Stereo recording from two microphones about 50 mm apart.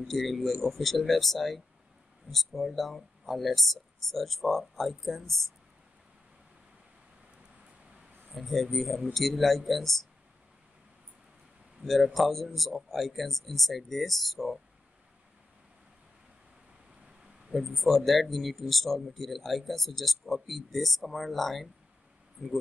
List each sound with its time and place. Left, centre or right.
0.1 s speech: centre
8.4 s speech: centre
11.9 s speech: centre
17.0 s a sound: centre
17.7 s speech: centre